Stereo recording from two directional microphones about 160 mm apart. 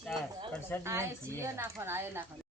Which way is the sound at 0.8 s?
15° right (ahead or behind).